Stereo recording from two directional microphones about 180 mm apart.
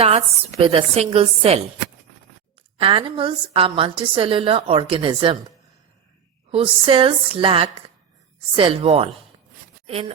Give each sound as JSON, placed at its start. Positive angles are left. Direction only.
{"t": 0.0, "sound": "speech", "side_deg": -35}
{"t": 2.7, "sound": "a woman's voice", "side_deg": -30}
{"t": 6.5, "sound": "a woman's voice", "side_deg": -30}